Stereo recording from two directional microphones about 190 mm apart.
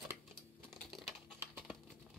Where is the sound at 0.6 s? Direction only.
Centre (ahead or behind).